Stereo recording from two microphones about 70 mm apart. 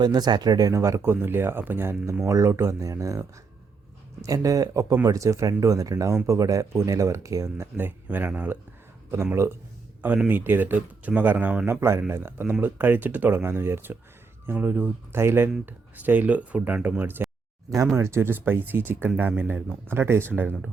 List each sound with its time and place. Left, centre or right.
0.0 s speech: right
0.7 s speech: right
2.2 s speech: right
10.2 s speech: right
15.6 s speech: right
17.9 s speech: right